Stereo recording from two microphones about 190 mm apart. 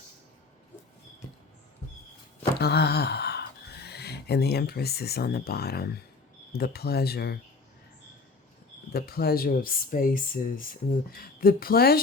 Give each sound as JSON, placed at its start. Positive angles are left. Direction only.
{"t": 2.6, "sound": "speech", "side_deg": 60}
{"t": 8.9, "sound": "speech", "side_deg": 55}